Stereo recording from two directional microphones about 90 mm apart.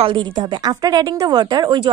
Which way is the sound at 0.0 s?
60° right (ahead or behind).